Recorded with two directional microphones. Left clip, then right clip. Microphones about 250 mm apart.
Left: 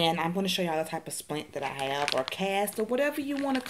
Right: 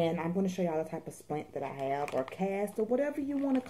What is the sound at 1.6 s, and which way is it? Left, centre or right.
Speech, left.